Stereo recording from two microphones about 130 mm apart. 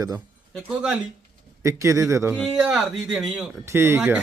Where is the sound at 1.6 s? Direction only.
25° right (ahead or behind).